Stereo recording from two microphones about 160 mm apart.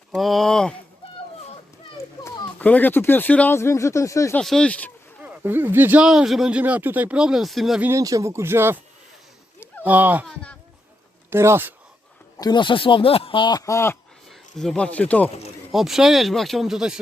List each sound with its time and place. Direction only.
0.1 s speech: centre (ahead or behind)
2.2 s speech: 10° left (ahead or behind)
4.4 s speech: 5° left (ahead or behind)
5.2 s speech: 10° right (ahead or behind)
7.9 s speech: 20° right (ahead or behind)
9.8 s speech: 10° right (ahead or behind)
10.2 s a sound: 5° left (ahead or behind)
11.3 s speech: 15° right (ahead or behind)
12.4 s speech: 25° left (ahead or behind)
14.3 s speech: centre (ahead or behind)
15.7 s speech: centre (ahead or behind)